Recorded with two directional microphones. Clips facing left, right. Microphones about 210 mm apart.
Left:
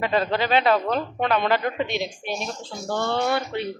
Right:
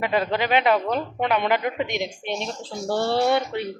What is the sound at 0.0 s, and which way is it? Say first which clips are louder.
Speech: even; 15° right (ahead or behind).